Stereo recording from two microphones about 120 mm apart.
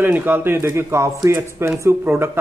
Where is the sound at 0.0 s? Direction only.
15° right (ahead or behind).